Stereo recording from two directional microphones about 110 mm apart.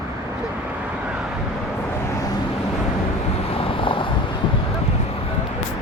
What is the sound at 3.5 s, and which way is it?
Vehicle, 55° left (ahead or behind).